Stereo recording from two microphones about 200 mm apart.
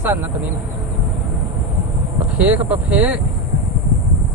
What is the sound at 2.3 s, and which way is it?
Speech, 5° right (ahead or behind).